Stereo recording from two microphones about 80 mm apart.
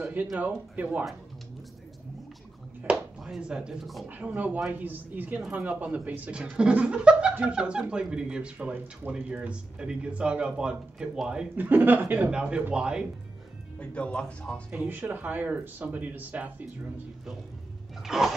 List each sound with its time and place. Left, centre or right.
0.0 s a sound: centre
0.4 s speech: centre
3.2 s speech: centre
4.1 s speech: centre
11.5 s speech: right
12.3 s speech: centre
13.7 s speech: centre
14.7 s speech: right
18.0 s a sound: centre